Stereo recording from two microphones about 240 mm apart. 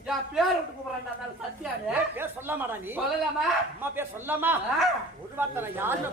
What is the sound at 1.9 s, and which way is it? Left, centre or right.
Speech, centre.